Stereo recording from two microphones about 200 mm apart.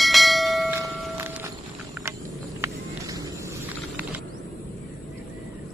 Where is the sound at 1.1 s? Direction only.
10° right (ahead or behind).